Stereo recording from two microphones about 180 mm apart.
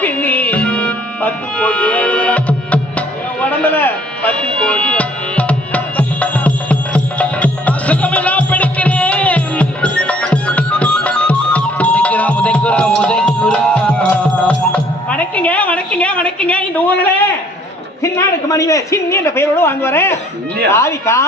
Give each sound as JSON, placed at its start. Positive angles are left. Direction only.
{"t": 0.0, "sound": "music", "side_deg": 10}
{"t": 18.0, "sound": "a man's voice", "side_deg": 15}